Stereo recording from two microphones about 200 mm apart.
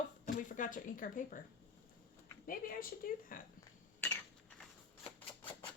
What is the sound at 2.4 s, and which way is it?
Speech, 45° left (ahead or behind).